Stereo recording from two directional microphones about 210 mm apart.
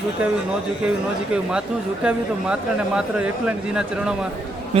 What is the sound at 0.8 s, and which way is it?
A man's voice, 5° right (ahead or behind).